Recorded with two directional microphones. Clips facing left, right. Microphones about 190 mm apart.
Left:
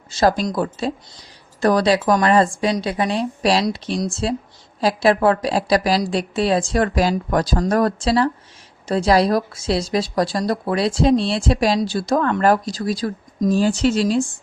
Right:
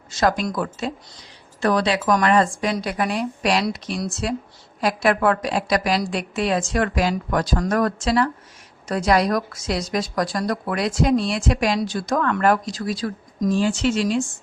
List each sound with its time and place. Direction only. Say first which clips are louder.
0.1 s speech: left 3 dB; 30° left (ahead or behind)